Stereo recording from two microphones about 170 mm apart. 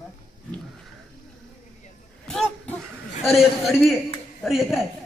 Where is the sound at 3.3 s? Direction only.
Centre (ahead or behind).